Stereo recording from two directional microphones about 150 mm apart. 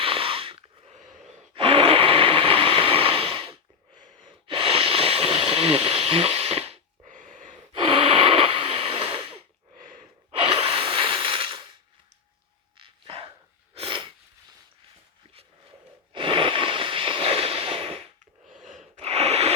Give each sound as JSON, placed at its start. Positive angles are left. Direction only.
{"t": 0.0, "sound": "snort", "side_deg": -40}
{"t": 1.0, "sound": "breathing", "side_deg": 0}
{"t": 1.5, "sound": "a sound", "side_deg": -40}
{"t": 4.3, "sound": "wheeze", "side_deg": -35}
{"t": 7.7, "sound": "snort", "side_deg": -35}
{"t": 10.3, "sound": "gasp", "side_deg": -40}
{"t": 12.7, "sound": "dog", "side_deg": -35}
{"t": 13.7, "sound": "sneeze", "side_deg": -35}
{"t": 16.1, "sound": "a sound", "side_deg": -35}
{"t": 18.6, "sound": "gasp", "side_deg": -50}